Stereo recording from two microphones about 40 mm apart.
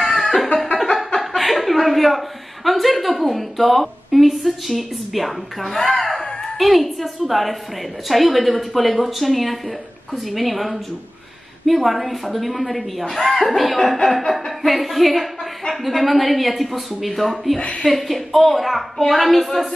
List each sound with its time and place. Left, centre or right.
0.2 s a sound: centre
1.2 s chuckle: centre
5.9 s a woman's voice: centre
17.6 s a woman's voice: left
17.8 s a woman's voice: centre